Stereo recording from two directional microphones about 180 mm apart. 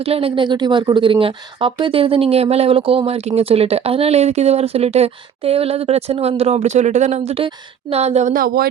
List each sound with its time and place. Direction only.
0.0 s speech: 30° right (ahead or behind); by 8.6 s 55° right (ahead or behind)